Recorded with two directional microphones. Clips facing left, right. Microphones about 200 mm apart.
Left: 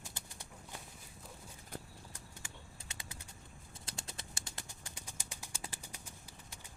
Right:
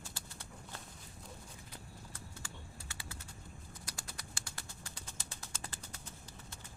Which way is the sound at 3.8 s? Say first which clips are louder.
Left 3 dB; 25° left (ahead or behind).